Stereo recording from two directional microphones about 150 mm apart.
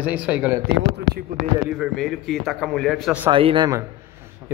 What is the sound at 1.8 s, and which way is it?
Speech, centre (ahead or behind).